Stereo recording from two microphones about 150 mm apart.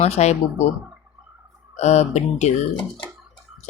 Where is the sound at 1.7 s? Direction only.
45° left (ahead or behind).